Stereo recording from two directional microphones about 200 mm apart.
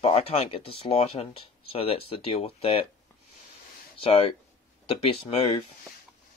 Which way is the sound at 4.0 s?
25° left (ahead or behind).